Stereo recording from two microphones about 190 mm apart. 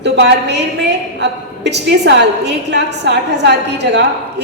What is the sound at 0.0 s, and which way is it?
A woman's voice, 65° right (ahead or behind).